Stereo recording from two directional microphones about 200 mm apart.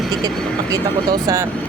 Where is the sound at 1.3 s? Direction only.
15° right (ahead or behind).